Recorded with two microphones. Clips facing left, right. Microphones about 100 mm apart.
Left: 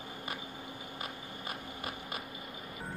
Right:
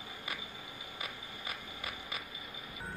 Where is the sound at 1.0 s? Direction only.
55° left (ahead or behind).